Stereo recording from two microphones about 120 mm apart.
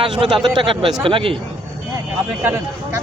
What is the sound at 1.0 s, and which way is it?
Speech, 45° right (ahead or behind).